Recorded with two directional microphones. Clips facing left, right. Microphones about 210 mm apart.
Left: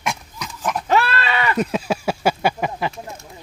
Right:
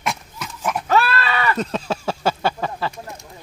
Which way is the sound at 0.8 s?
20° left (ahead or behind).